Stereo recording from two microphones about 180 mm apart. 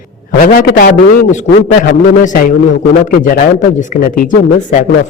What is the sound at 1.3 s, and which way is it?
Speech, 30° left (ahead or behind).